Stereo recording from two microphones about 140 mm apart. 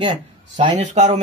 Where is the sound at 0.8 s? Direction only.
55° right (ahead or behind).